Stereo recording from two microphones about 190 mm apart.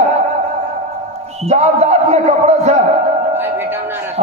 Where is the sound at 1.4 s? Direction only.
35° right (ahead or behind).